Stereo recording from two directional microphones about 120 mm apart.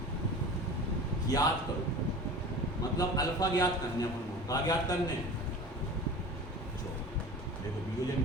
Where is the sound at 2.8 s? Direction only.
30° left (ahead or behind).